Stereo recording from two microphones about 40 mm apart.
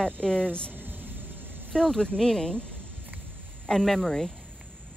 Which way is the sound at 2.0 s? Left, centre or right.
Centre.